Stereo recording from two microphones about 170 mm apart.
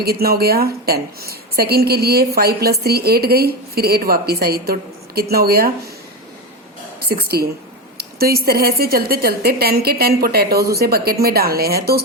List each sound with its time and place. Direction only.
0.0 s a woman's voice: 65° right (ahead or behind)
7.0 s a woman's voice: 65° right (ahead or behind)